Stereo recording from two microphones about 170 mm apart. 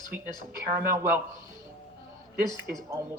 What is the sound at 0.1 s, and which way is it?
Speech, 10° right (ahead or behind).